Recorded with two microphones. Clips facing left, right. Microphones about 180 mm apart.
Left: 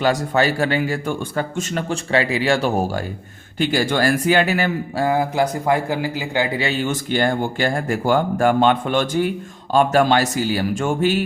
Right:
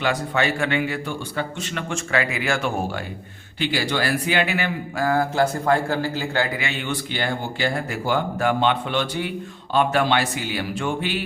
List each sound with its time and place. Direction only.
0.0 s a man's voice: 40° left (ahead or behind)
4.9 s a man's voice: 20° left (ahead or behind)
6.6 s a man's voice: 35° left (ahead or behind)